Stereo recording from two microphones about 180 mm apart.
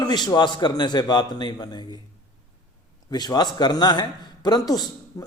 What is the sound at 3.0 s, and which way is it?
Speech, 25° left (ahead or behind).